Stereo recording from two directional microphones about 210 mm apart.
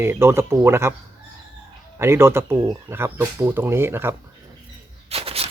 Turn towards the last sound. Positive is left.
turn(degrees=-30)  # may be behind; listen again after turning